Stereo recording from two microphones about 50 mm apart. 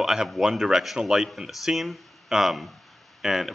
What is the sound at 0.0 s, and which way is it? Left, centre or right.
Speech, centre.